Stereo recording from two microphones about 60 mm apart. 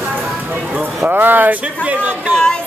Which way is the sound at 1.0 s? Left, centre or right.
Right.